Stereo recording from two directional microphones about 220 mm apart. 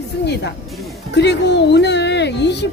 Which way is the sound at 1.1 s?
50° left (ahead or behind).